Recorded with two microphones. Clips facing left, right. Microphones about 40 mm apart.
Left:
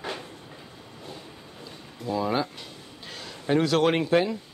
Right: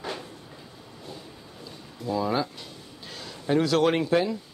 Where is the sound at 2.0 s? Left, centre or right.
Left.